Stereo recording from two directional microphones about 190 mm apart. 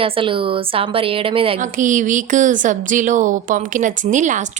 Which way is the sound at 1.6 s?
40° right (ahead or behind).